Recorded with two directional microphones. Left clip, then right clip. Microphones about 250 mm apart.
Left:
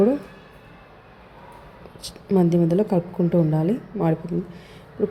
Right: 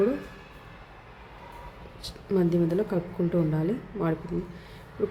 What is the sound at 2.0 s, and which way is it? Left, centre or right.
Speech, centre.